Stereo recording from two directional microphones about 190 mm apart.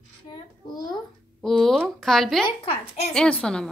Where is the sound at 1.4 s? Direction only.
Centre (ahead or behind).